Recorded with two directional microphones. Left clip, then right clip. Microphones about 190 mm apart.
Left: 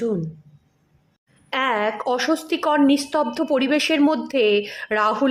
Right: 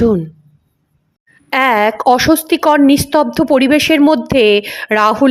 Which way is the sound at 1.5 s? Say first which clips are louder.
Right 10 dB; 30° right (ahead or behind).